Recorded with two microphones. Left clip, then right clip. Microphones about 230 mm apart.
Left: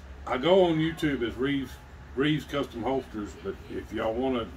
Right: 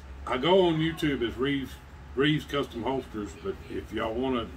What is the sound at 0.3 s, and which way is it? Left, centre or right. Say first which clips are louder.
Speech: left 1 dB; centre.